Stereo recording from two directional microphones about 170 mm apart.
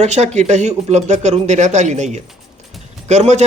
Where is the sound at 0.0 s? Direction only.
40° right (ahead or behind).